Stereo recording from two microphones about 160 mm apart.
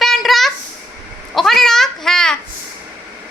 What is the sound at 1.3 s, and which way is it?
Cat, centre (ahead or behind).